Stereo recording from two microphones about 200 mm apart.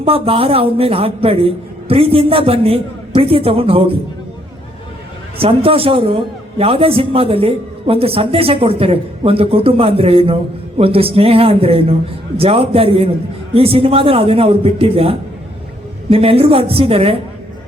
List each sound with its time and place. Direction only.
0.0 s a man's voice: 30° right (ahead or behind)
5.4 s a man's voice: 30° right (ahead or behind)